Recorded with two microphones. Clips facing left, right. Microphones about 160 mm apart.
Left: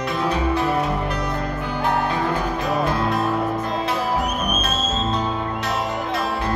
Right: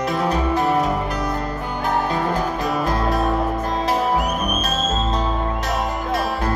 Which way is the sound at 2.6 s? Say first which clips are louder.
Even; 40° right (ahead or behind).